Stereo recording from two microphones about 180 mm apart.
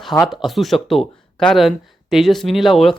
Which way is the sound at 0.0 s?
Centre (ahead or behind).